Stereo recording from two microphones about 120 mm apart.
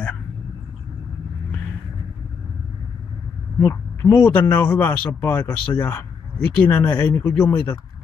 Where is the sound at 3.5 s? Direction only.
15° left (ahead or behind).